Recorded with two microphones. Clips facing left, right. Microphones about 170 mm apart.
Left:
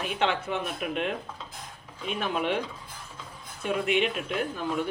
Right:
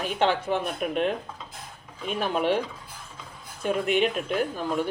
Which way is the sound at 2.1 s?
35° right (ahead or behind).